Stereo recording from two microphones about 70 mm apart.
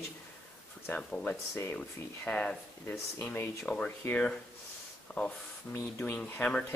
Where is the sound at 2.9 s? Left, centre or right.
Left.